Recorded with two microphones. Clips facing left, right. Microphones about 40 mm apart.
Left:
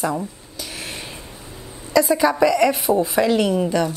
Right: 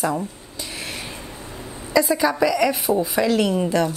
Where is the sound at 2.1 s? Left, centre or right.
Centre.